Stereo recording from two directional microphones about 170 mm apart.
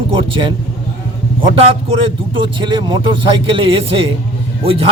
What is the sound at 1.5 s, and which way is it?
A man's voice, 30° right (ahead or behind).